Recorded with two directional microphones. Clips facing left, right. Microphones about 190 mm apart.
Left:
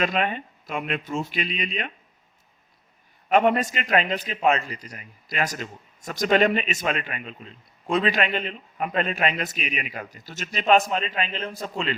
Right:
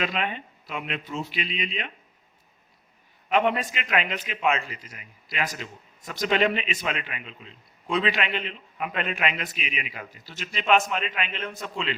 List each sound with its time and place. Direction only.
0.0 s a man's voice: 45° left (ahead or behind)
3.2 s a man's voice: 45° left (ahead or behind)